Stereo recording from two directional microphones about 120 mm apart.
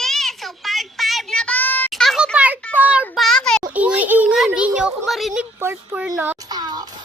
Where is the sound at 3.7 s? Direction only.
10° right (ahead or behind).